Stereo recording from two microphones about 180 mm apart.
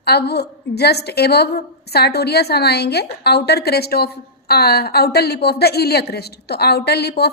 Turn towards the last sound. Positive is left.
turn(degrees=65)  # may be behind; listen again after turning